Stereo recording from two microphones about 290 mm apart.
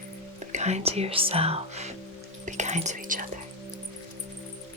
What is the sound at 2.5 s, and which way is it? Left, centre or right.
Whispering, right.